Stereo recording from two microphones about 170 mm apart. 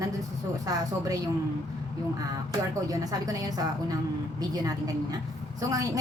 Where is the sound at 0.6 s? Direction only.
20° right (ahead or behind).